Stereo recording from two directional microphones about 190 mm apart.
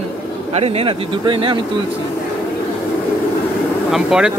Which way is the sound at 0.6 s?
30° right (ahead or behind).